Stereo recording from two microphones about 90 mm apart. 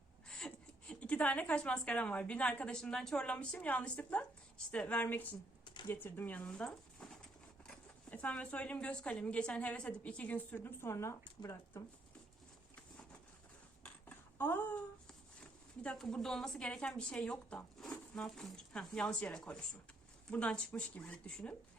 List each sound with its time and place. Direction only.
0.3 s a woman's voice: 10° left (ahead or behind)
6.4 s speech: 5° left (ahead or behind); by 11.8 s 30° left (ahead or behind)
13.8 s a sound: 25° left (ahead or behind)
15.8 s speech: 10° left (ahead or behind)